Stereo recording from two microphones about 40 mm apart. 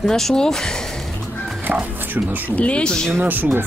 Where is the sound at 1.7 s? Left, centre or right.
Right.